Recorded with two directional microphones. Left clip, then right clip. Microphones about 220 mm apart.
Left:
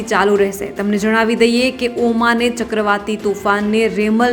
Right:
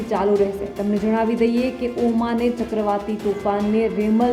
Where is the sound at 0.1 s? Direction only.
10° left (ahead or behind).